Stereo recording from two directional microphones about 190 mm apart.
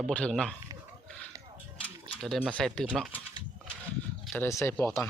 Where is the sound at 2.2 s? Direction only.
Centre (ahead or behind).